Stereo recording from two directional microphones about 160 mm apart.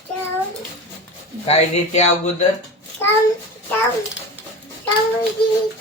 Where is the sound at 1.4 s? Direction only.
40° left (ahead or behind).